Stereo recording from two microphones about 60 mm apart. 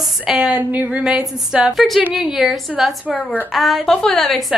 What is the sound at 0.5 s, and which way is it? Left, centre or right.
Speech, right.